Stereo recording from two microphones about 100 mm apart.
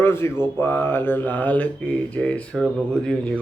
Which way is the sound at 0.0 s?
25° left (ahead or behind).